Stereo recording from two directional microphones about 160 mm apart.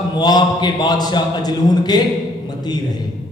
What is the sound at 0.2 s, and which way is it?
A man's voice, 25° left (ahead or behind).